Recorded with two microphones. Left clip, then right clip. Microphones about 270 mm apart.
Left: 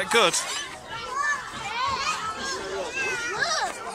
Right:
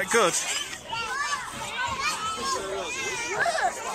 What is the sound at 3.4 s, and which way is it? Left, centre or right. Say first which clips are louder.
Children playing: right 2 dB; right.